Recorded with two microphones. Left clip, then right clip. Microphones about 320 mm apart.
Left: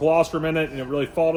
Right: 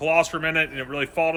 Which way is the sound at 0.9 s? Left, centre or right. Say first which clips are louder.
Left 3 dB; centre.